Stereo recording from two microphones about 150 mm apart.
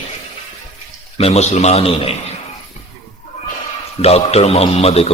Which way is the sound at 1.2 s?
45° left (ahead or behind).